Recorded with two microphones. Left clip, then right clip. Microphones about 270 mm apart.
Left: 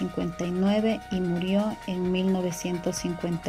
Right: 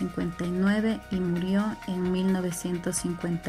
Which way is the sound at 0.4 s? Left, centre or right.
Left.